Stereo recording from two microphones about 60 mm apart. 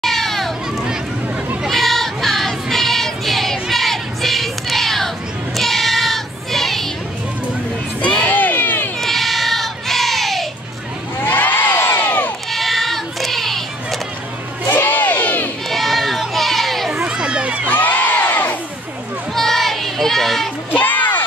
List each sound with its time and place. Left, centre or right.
0.0 s children playing: centre
1.7 s child singing: centre
8.0 s music: centre
8.3 s a sound: left
9.0 s child singing: centre
11.1 s crowd: left
11.7 s crowd: left
12.4 s child singing: centre
14.7 s crowd: left
15.7 s a sound: centre
17.0 s a sound: centre
17.6 s crowd: left
19.3 s child singing: centre
20.7 s music: left